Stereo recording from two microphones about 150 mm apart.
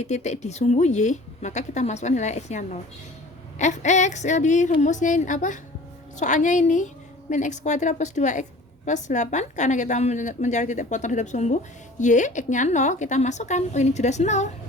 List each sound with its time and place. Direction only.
0.0 s a woman's voice: 50° left (ahead or behind)